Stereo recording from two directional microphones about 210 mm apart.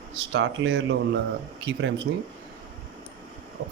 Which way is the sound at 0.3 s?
70° right (ahead or behind).